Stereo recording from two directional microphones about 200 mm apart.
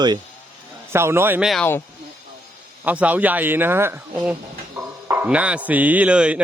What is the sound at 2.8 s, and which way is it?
A man's voice, 10° right (ahead or behind).